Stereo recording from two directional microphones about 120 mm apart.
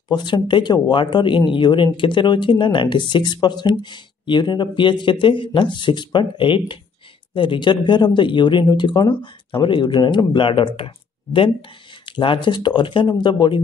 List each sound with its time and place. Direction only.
0.1 s speech: 40° left (ahead or behind)